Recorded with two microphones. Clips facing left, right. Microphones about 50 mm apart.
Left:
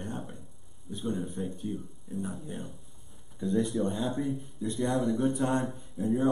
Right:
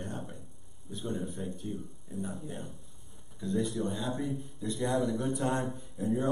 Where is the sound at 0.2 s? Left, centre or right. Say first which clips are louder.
Left 1 dB; centre.